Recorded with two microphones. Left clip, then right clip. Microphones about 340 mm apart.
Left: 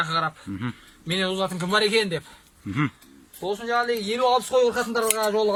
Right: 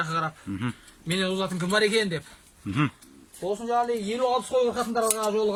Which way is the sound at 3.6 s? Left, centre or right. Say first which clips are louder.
Left 2 dB; left.